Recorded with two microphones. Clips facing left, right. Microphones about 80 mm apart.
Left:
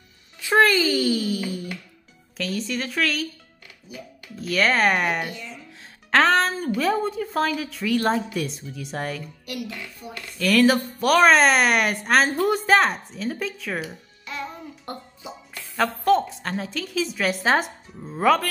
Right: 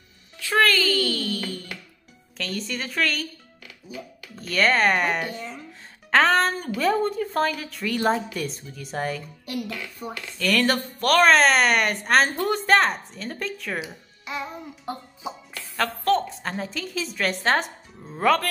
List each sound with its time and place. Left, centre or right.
0.4 s a child's voice: centre
4.4 s speech: centre
5.3 s a sound: right
5.7 s speech: centre
14.2 s music: centre
15.8 s a woman's voice: centre